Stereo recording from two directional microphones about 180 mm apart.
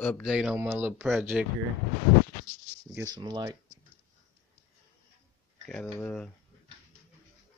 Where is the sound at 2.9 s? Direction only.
20° right (ahead or behind).